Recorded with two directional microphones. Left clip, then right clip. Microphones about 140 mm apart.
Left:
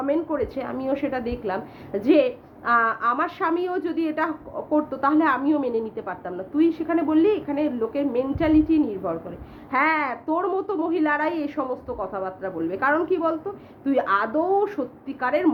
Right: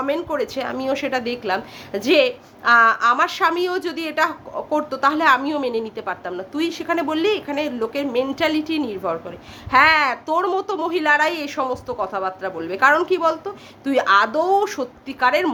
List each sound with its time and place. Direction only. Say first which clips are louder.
0.0 s a woman's voice: right 2 dB; 15° right (ahead or behind)